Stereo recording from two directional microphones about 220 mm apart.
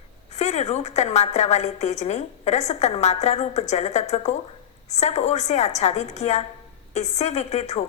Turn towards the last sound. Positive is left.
turn(degrees=30)  # may be behind; listen again after turning